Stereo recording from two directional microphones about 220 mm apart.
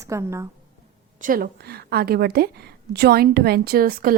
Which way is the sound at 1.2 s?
40° right (ahead or behind).